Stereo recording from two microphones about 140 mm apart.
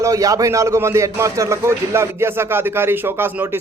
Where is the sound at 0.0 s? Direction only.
25° right (ahead or behind).